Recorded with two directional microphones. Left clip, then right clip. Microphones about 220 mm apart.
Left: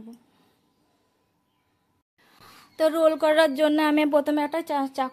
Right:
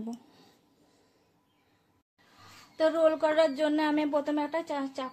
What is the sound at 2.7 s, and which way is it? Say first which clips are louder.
A woman's voice: left 4 dB; 50° left (ahead or behind).